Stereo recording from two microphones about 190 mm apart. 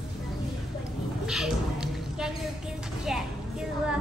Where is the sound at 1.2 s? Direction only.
5° right (ahead or behind).